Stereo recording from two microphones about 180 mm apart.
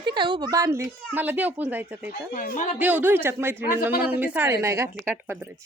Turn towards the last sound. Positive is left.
turn(degrees=-15)  # may be behind; listen again after turning